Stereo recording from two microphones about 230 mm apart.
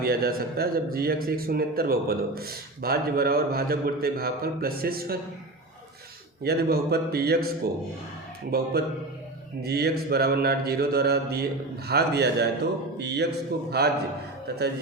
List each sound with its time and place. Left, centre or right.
0.0 s a man's voice: right
6.4 s a man's voice: right